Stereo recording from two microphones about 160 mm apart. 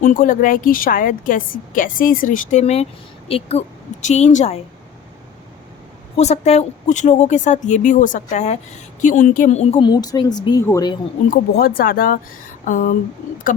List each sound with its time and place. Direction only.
0.0 s a woman's voice: 55° left (ahead or behind)
6.1 s a woman's voice: 45° left (ahead or behind)
9.8 s a woman's voice: 25° left (ahead or behind)
11.3 s a woman's voice: 70° left (ahead or behind)